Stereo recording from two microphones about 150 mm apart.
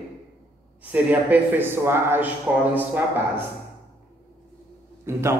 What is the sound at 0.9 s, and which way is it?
A man's voice, 10° right (ahead or behind).